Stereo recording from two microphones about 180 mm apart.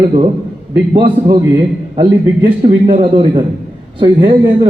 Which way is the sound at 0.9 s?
25° right (ahead or behind).